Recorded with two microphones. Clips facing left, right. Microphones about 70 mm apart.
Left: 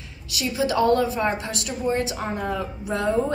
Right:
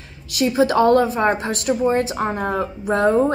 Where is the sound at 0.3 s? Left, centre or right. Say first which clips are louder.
Right 7 dB; right.